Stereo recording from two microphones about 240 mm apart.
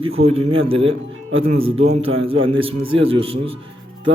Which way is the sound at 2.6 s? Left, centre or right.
Right.